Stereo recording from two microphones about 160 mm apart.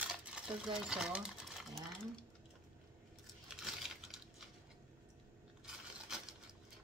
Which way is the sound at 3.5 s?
Centre (ahead or behind).